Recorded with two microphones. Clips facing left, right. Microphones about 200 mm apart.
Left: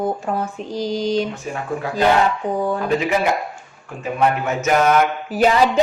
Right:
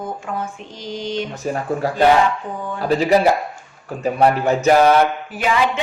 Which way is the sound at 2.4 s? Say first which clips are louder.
Left 7 dB; 35° left (ahead or behind).